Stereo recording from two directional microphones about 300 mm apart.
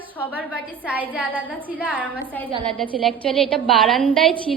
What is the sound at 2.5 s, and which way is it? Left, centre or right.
Speech, centre.